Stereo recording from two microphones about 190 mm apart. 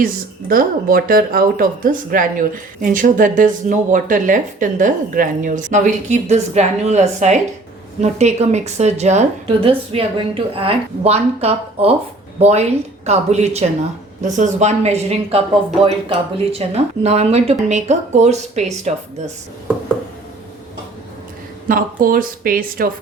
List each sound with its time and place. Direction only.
0.0 s speech: 50° right (ahead or behind)
21.7 s speech: 50° right (ahead or behind)